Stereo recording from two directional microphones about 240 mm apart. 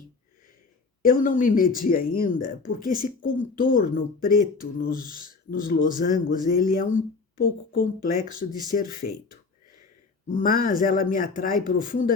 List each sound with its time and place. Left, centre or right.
1.0 s speech: left